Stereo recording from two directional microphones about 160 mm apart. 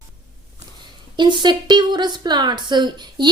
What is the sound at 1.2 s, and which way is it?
A woman's voice, 30° right (ahead or behind).